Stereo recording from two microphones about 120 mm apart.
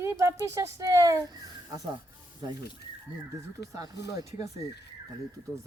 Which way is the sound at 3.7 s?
30° right (ahead or behind).